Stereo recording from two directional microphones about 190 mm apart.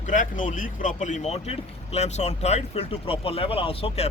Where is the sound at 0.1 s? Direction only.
45° left (ahead or behind).